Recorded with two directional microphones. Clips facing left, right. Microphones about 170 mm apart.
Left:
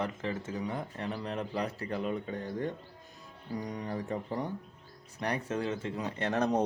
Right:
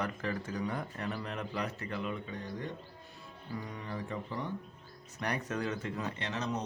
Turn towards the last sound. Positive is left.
turn(degrees=55)  # may be behind; listen again after turning